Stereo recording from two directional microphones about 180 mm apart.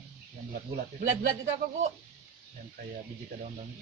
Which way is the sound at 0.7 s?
45° right (ahead or behind).